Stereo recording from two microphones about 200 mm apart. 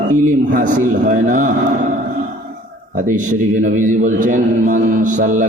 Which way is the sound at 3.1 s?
40° right (ahead or behind).